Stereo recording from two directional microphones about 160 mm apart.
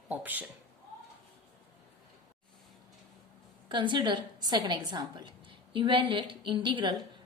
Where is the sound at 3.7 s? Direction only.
30° right (ahead or behind).